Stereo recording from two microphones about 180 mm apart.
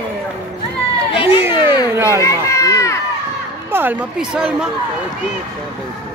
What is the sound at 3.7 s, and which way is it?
Speech, 5° right (ahead or behind).